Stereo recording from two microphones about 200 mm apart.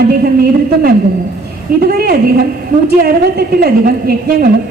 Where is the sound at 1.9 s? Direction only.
50° right (ahead or behind).